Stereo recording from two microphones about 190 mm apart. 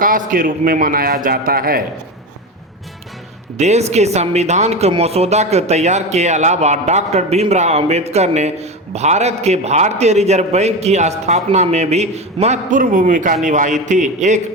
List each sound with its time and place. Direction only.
0.0 s a man's voice: 45° right (ahead or behind)
3.6 s speech: 35° right (ahead or behind)